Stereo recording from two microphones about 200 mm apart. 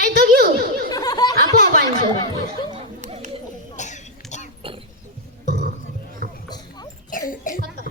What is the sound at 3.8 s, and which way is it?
Cough, 35° left (ahead or behind).